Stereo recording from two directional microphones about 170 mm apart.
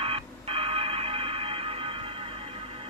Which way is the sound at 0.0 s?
35° right (ahead or behind).